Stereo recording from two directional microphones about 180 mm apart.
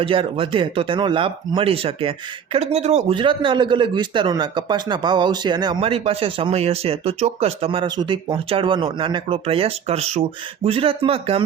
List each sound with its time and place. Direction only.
0.0 s speech: 30° right (ahead or behind)